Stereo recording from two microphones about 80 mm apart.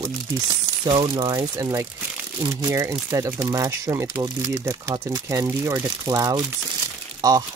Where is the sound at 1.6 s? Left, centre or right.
Right.